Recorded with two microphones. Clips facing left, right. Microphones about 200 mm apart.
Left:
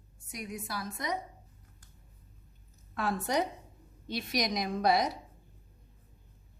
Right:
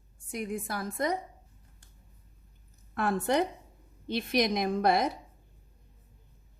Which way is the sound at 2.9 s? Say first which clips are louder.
Right 4 dB; 50° right (ahead or behind).